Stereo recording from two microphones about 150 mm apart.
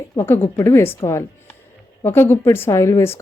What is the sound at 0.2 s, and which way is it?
Speech, 15° left (ahead or behind).